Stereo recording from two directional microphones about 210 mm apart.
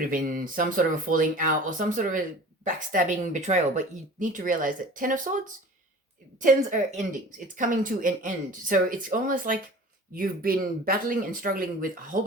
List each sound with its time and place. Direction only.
0.1 s speech: 40° right (ahead or behind)